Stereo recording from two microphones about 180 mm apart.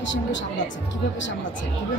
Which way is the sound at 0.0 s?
90° left.